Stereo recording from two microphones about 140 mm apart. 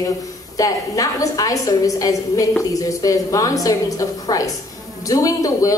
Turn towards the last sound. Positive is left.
turn(degrees=25)  # may be behind; listen again after turning